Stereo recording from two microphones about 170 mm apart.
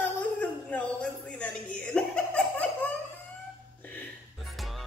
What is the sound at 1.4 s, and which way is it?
Chuckle, 5° left (ahead or behind).